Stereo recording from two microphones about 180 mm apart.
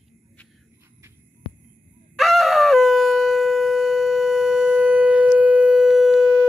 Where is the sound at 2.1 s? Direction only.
Centre (ahead or behind).